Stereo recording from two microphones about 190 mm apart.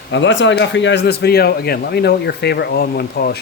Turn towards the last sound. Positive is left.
turn(degrees=55)  # may be behind; listen again after turning